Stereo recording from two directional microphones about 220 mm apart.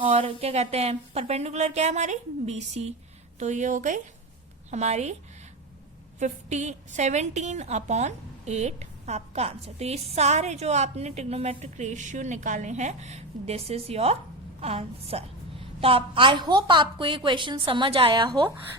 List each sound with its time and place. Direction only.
0.0 s a woman's voice: 25° right (ahead or behind)
6.1 s a woman's voice: 35° right (ahead or behind)